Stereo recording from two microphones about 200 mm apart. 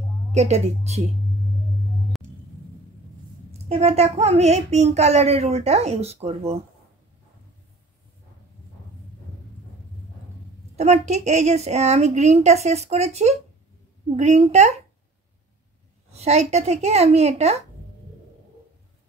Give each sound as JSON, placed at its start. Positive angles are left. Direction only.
{"t": 0.3, "sound": "a child's voice", "side_deg": -35}
{"t": 3.6, "sound": "a child's voice", "side_deg": -30}
{"t": 10.8, "sound": "a child's voice", "side_deg": -35}
{"t": 16.1, "sound": "a child's voice", "side_deg": -30}